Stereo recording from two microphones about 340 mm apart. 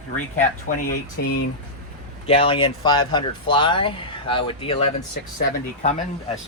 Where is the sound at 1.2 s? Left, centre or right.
Left.